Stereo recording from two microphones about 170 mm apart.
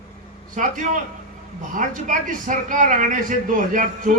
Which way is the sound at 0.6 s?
50° right (ahead or behind).